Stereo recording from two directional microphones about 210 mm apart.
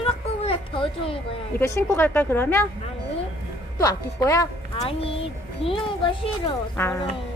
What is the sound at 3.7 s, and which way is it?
Speech, 15° left (ahead or behind).